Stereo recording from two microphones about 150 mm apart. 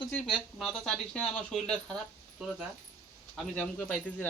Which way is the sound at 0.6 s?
5° left (ahead or behind).